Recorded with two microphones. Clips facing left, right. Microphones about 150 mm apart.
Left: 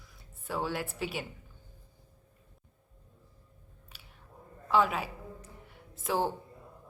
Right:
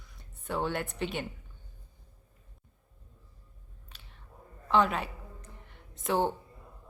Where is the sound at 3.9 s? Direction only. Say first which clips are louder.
Left 1 dB; 10° left (ahead or behind).